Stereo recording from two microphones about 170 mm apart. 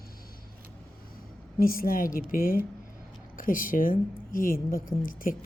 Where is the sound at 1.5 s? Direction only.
60° left (ahead or behind).